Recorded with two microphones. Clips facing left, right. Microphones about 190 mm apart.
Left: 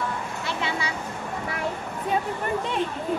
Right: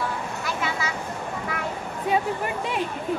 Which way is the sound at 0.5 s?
25° left (ahead or behind).